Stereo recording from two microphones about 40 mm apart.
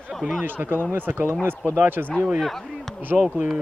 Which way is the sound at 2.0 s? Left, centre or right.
Right.